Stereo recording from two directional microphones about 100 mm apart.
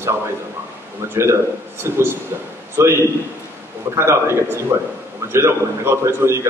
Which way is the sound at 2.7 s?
25° right (ahead or behind).